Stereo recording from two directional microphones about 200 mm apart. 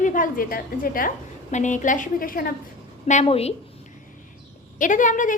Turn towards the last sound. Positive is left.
turn(degrees=40)  # may be behind; listen again after turning